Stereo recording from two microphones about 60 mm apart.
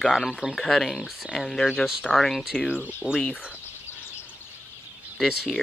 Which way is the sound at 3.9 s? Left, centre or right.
Left.